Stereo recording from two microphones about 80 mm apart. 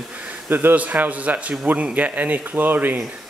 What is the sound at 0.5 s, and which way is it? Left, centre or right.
Speech, right.